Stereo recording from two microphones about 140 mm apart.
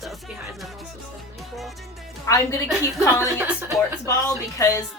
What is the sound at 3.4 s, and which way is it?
Speech, 15° right (ahead or behind).